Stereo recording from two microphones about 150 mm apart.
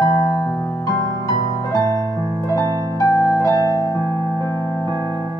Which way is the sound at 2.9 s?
20° left (ahead or behind).